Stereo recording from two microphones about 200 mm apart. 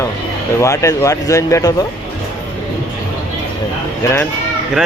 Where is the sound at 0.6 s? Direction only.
15° left (ahead or behind).